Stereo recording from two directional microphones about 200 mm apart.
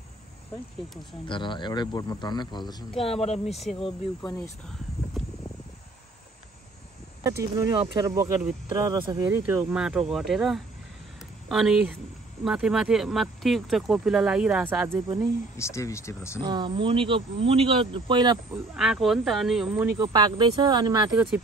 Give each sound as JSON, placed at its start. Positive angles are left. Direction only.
{"t": 1.2, "sound": "speech", "side_deg": 25}
{"t": 3.4, "sound": "speech", "side_deg": 0}
{"t": 3.8, "sound": "speech", "side_deg": 20}
{"t": 7.2, "sound": "speech", "side_deg": -15}
{"t": 15.5, "sound": "speech", "side_deg": 15}
{"t": 16.3, "sound": "speech", "side_deg": -20}
{"t": 18.8, "sound": "speech", "side_deg": 0}
{"t": 20.0, "sound": "speech", "side_deg": -20}